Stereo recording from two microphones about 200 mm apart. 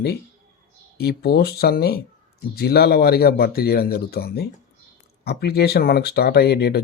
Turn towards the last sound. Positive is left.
turn(degrees=55)  # may be behind; listen again after turning